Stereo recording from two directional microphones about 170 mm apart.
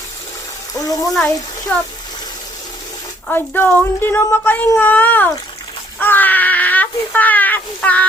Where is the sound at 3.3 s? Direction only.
10° left (ahead or behind).